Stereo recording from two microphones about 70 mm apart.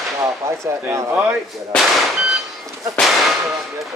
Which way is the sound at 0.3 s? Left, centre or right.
Right.